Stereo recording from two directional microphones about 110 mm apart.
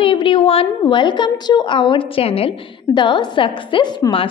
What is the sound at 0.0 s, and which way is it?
A woman's voice, 50° left (ahead or behind).